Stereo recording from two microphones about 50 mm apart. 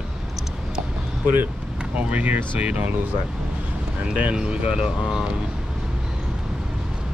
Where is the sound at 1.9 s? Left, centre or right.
Right.